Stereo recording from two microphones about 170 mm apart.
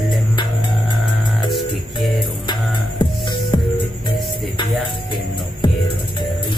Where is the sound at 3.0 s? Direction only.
25° left (ahead or behind).